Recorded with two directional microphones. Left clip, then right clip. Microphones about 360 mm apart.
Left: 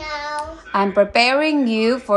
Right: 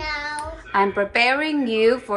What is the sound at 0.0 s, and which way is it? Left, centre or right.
A child's voice, centre.